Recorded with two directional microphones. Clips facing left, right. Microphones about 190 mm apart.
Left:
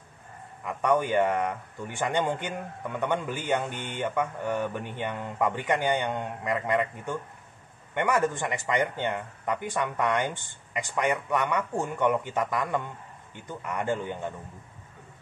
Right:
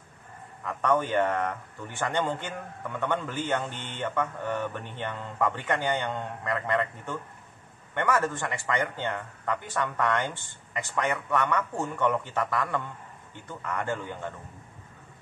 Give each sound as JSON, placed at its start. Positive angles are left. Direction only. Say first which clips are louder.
{"t": 0.7, "sound": "speech", "louder": "left 1 dB", "side_deg": 10}